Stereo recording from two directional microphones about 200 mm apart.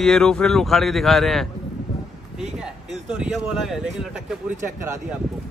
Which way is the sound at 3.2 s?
Centre (ahead or behind).